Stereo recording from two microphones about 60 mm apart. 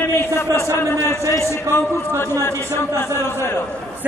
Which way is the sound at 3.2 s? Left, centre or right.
Left.